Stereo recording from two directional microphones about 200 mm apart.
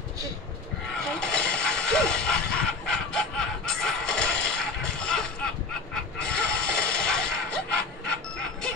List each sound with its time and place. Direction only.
1.2 s dog: 5° left (ahead or behind)
6.1 s mechanisms: 5° left (ahead or behind)